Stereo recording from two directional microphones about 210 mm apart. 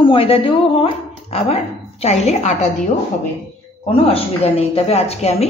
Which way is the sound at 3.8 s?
30° left (ahead or behind).